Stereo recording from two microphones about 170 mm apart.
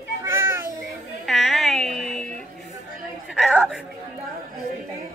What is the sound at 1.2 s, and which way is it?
Music, centre (ahead or behind).